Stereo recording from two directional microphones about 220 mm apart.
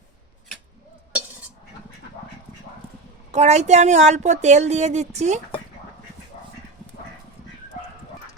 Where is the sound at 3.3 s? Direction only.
30° right (ahead or behind).